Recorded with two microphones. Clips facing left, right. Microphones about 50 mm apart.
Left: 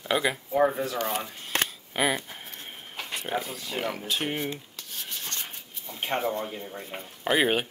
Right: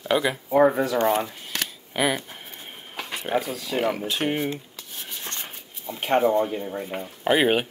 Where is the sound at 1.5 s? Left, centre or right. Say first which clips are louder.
Left 3 dB; left.